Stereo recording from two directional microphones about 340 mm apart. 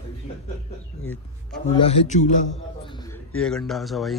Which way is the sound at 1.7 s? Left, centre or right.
Centre.